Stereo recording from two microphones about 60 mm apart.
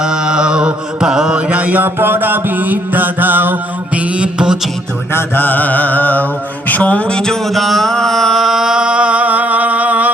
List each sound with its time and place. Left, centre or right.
0.0 s mantra: centre
1.8 s mantra: right
4.1 s music: centre
5.1 s mantra: left
6.7 s a sound: left; by 10.1 s right